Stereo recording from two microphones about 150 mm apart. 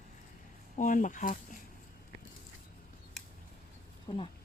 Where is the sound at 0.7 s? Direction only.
60° left (ahead or behind).